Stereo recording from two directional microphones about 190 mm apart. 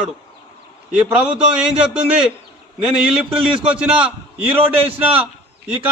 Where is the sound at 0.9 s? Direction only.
10° right (ahead or behind).